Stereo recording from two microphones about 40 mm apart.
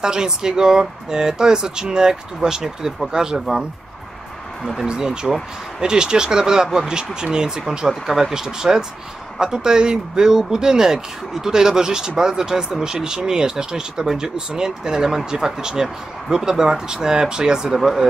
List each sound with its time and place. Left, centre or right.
0.0 s speech: centre
4.8 s speech: right
17.7 s speech: centre